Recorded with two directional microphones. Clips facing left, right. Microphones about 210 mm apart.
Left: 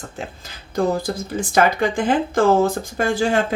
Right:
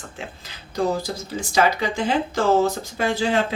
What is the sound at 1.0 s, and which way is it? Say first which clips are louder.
Speech: left 5 dB; 55° left (ahead or behind).